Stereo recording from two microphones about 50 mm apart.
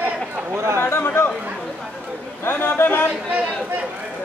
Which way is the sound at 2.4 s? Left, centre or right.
Left.